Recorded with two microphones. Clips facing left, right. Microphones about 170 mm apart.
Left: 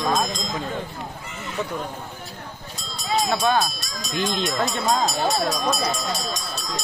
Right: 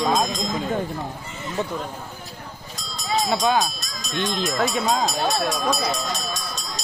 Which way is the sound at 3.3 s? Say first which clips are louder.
Right 1 dB; 15° right (ahead or behind).